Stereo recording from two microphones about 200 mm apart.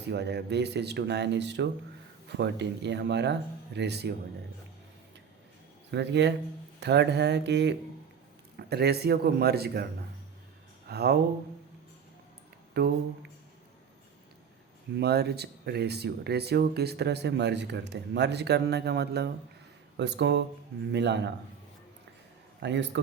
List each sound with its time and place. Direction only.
0.1 s speech: 55° right (ahead or behind)
5.9 s a man's voice: 60° right (ahead or behind)
10.8 s speech: 50° right (ahead or behind)
12.8 s a man's voice: 55° right (ahead or behind)
14.9 s speech: 55° right (ahead or behind)
22.6 s speech: 60° right (ahead or behind)